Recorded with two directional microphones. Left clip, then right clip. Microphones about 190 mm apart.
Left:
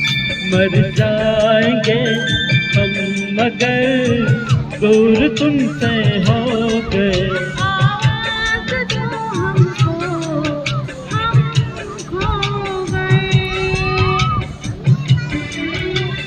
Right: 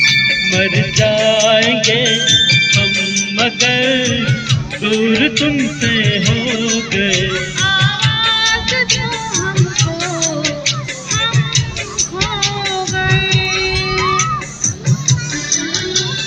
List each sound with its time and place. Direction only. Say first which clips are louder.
0.0 s music: right 7 dB; 60° left (ahead or behind)